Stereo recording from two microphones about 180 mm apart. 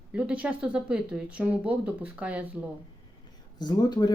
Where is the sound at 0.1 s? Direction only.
5° right (ahead or behind).